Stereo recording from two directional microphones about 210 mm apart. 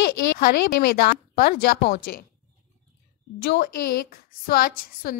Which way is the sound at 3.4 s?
45° left (ahead or behind).